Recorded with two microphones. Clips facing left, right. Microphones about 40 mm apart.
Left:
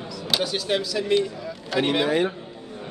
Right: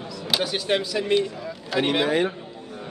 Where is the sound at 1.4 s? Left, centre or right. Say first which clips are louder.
Even; centre.